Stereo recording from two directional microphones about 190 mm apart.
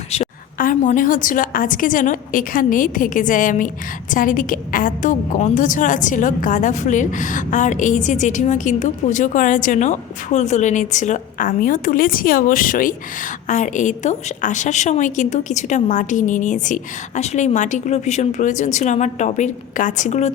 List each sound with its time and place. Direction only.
0.6 s a woman's voice: 45° left (ahead or behind)